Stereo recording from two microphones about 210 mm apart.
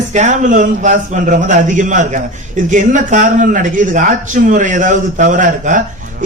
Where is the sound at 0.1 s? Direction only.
35° right (ahead or behind).